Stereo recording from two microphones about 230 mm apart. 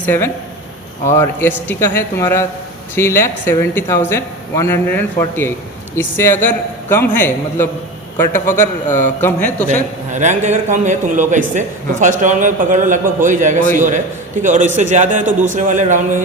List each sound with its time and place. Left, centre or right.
0.0 s speech: centre
9.2 s speech: centre
9.6 s a man's voice: right